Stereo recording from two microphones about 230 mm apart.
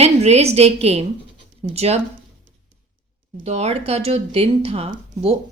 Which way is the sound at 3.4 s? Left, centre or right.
Right.